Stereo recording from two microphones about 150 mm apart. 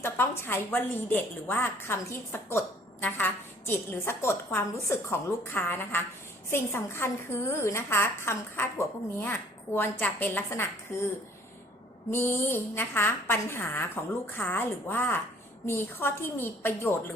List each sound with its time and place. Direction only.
0.0 s a woman's voice: 15° left (ahead or behind)
12.1 s a woman's voice: 15° left (ahead or behind)